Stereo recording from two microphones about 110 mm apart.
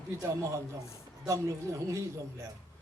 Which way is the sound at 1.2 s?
30° right (ahead or behind).